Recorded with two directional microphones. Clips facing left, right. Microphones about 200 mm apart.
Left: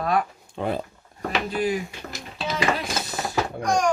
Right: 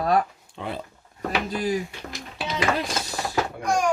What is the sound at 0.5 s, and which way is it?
Speech, 45° left (ahead or behind).